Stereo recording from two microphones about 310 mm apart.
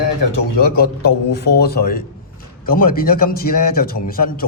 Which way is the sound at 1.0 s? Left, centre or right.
Left.